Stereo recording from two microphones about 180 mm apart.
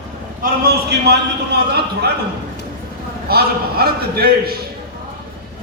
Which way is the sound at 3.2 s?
60° right (ahead or behind).